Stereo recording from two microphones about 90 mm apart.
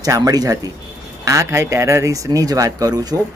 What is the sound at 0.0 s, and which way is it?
A man's voice, 45° right (ahead or behind).